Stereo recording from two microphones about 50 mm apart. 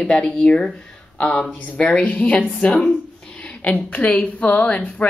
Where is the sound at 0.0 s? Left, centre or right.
Centre.